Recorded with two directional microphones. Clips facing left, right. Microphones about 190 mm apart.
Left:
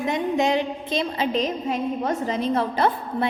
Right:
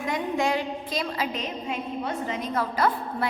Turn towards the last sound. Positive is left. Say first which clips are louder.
# left 3 dB
turn(degrees=25)  # may be behind; listen again after turning